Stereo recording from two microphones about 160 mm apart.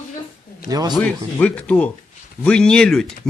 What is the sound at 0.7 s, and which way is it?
Speech, 25° right (ahead or behind).